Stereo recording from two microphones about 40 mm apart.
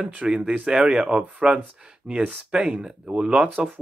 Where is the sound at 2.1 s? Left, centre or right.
Right.